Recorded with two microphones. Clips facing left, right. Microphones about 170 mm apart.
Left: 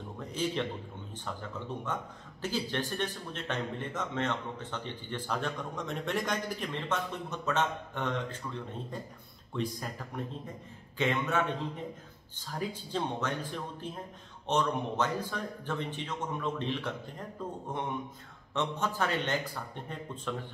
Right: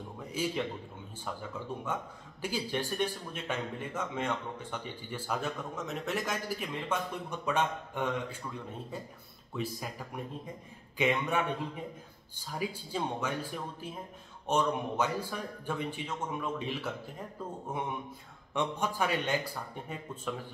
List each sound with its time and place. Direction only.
0.2 s a man's voice: 10° right (ahead or behind)
9.5 s speech: 5° right (ahead or behind)